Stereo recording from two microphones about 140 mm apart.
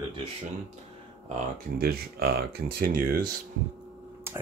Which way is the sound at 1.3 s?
90° right.